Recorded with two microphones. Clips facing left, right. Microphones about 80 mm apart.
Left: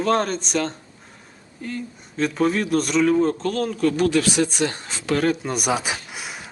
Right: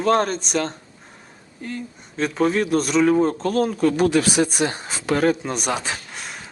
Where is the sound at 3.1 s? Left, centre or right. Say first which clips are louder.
Right 1 dB; centre.